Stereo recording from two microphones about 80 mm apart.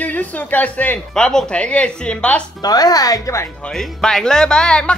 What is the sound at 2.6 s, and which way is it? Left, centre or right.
Speech, left.